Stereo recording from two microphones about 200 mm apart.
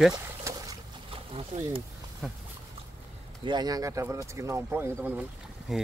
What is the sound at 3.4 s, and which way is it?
Speech, 20° right (ahead or behind).